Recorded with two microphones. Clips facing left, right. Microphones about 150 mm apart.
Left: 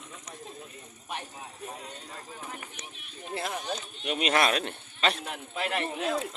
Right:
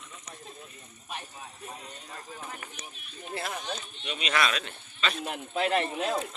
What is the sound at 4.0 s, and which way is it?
Speech, 50° left (ahead or behind).